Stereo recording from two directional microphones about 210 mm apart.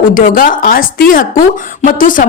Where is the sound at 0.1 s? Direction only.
40° left (ahead or behind).